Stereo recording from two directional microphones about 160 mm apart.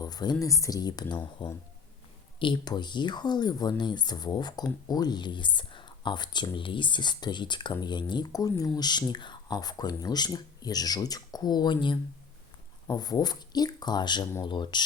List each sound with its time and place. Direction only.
0.0 s speech: 25° left (ahead or behind)